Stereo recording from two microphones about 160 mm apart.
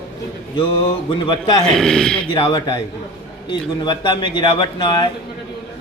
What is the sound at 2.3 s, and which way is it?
Speech, 25° left (ahead or behind).